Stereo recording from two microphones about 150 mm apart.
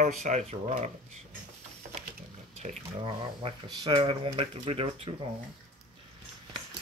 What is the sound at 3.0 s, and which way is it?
Speech, 35° right (ahead or behind).